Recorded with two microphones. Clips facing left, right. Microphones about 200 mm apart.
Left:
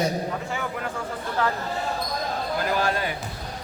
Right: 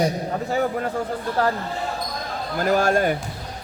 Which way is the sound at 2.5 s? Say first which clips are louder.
Right 7 dB; 45° right (ahead or behind).